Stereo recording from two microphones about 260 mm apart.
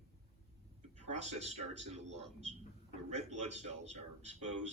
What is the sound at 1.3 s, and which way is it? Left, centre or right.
A man's voice, right.